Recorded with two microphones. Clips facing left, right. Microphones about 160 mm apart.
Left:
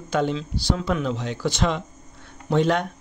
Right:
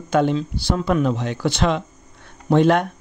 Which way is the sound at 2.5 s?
55° right (ahead or behind).